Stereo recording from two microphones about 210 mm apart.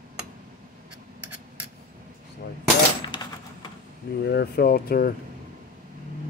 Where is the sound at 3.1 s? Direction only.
20° left (ahead or behind).